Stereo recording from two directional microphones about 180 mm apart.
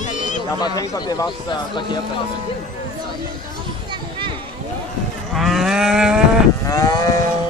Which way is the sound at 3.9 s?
25° right (ahead or behind).